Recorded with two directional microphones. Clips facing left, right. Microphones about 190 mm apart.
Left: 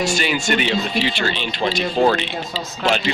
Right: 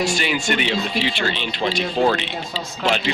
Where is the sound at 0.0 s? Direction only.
45° left (ahead or behind).